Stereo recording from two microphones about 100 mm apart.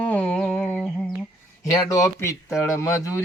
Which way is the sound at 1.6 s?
35° left (ahead or behind).